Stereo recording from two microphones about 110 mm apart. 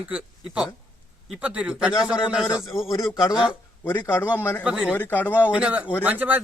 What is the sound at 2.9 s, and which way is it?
Speech, 35° left (ahead or behind).